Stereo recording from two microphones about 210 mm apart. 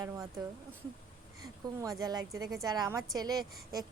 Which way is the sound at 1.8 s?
15° right (ahead or behind).